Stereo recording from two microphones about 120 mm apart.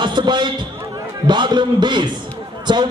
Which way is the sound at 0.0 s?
40° right (ahead or behind).